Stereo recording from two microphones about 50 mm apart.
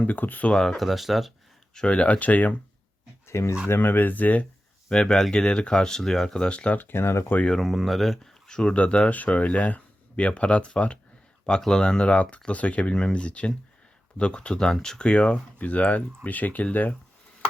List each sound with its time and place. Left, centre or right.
0.0 s speech: left
0.5 s speech: centre
0.8 s speech: centre
1.7 s speech: centre
3.2 s speech: left
3.8 s speech: left
4.9 s speech: centre
6.7 s speech: left
7.6 s speech: centre
8.4 s speech: centre; by 16.6 s left